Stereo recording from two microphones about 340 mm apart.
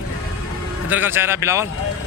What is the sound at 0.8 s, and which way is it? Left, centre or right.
Speech, centre.